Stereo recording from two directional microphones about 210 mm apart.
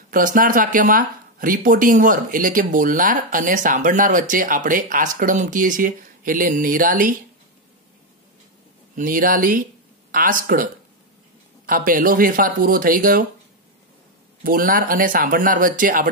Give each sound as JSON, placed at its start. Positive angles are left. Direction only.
{"t": 0.1, "sound": "speech", "side_deg": -40}
{"t": 8.9, "sound": "speech", "side_deg": -40}
{"t": 14.4, "sound": "speech", "side_deg": -40}